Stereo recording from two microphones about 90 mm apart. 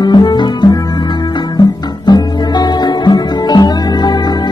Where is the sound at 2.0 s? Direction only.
50° left (ahead or behind).